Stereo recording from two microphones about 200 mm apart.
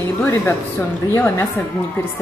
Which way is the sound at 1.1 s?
10° left (ahead or behind).